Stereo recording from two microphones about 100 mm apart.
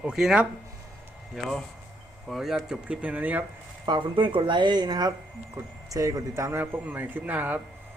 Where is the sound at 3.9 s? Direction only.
55° right (ahead or behind).